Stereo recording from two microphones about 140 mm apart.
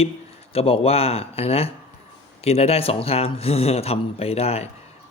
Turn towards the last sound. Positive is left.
turn(degrees=50)  # may be behind; listen again after turning